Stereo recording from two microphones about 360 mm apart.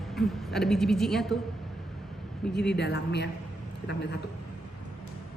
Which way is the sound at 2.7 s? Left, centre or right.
Left.